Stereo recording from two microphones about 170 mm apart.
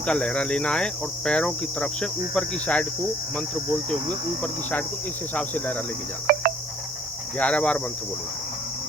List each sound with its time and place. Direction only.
0.0 s speech: 5° left (ahead or behind)
5.3 s cricket: 10° left (ahead or behind)
6.3 s cricket: 60° right (ahead or behind)
7.3 s cricket: 5° left (ahead or behind)